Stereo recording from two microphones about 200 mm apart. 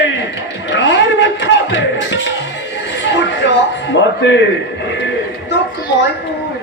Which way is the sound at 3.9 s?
65° left (ahead or behind).